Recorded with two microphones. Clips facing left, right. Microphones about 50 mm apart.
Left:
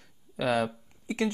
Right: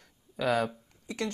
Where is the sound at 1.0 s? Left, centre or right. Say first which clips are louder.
Left 5 dB; centre.